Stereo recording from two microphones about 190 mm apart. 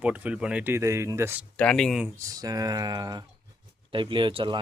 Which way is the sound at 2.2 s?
20° right (ahead or behind).